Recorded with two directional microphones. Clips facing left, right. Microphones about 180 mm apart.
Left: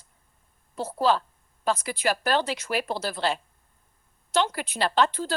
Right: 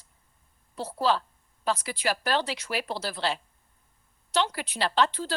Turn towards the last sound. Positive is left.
turn(degrees=50)  # may be behind; listen again after turning